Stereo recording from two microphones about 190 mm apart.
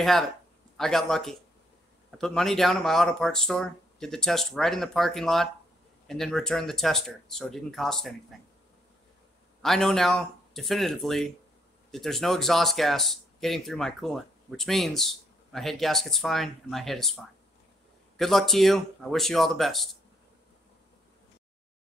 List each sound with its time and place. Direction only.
0.7 s speech: centre (ahead or behind)
9.6 s speech: centre (ahead or behind)